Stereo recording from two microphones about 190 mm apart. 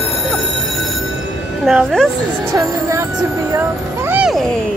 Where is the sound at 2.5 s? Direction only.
15° right (ahead or behind).